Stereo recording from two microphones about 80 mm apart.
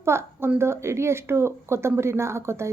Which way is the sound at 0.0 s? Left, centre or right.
Right.